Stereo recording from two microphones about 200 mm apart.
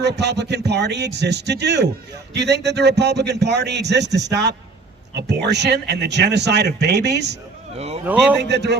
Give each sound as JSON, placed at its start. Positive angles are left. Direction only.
{"t": 0.0, "sound": "speech", "side_deg": -60}
{"t": 7.8, "sound": "speech", "side_deg": -30}
{"t": 8.4, "sound": "speech", "side_deg": -55}